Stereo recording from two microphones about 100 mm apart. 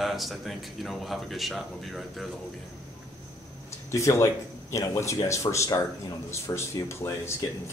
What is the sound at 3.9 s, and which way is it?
A man's voice, 30° left (ahead or behind).